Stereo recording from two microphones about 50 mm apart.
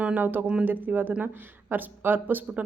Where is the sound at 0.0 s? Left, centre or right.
Right.